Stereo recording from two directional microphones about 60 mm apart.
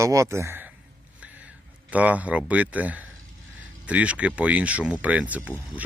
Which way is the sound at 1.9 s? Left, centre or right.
Right.